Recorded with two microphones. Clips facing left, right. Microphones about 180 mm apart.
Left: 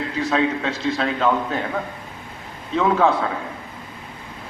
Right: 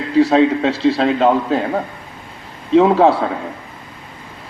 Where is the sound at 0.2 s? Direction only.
30° right (ahead or behind).